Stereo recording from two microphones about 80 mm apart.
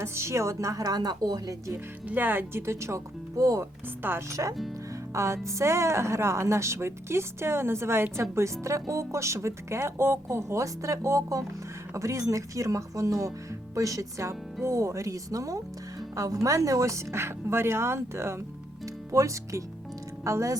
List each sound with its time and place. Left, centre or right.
0.0 s a woman's voice: right
2.0 s speech: right